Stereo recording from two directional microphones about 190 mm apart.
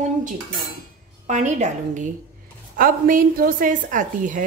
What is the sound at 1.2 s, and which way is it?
A woman's voice, 40° right (ahead or behind).